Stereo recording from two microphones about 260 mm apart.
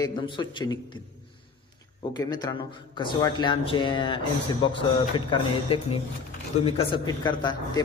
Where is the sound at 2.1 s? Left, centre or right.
Centre.